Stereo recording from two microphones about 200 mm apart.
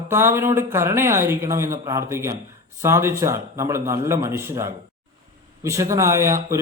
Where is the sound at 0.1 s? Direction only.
10° right (ahead or behind).